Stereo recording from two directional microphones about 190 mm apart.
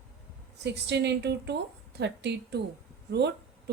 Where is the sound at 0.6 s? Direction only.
65° right (ahead or behind).